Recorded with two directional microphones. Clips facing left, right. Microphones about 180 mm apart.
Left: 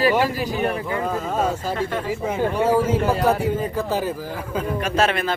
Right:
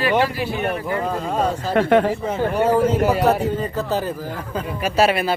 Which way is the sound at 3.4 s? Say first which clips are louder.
Even; 10° left (ahead or behind).